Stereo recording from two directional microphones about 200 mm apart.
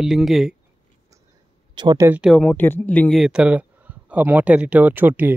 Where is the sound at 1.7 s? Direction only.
20° right (ahead or behind).